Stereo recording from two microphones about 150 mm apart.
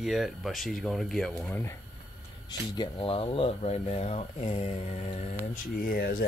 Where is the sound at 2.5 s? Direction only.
30° left (ahead or behind).